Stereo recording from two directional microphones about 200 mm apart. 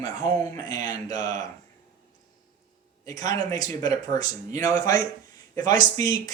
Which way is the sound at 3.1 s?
15° left (ahead or behind).